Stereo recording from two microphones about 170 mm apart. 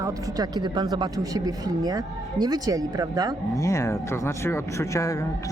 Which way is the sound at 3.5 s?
15° left (ahead or behind).